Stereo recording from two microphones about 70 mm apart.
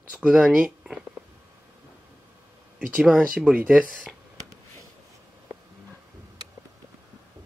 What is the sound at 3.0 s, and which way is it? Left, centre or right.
Speech, centre.